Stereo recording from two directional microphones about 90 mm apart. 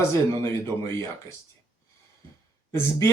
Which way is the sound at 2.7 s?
35° left (ahead or behind).